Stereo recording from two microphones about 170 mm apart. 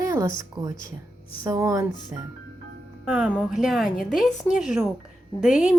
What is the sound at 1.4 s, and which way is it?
A woman's voice, 20° right (ahead or behind).